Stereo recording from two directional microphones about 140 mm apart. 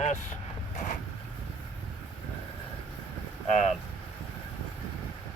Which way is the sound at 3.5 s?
55° left (ahead or behind).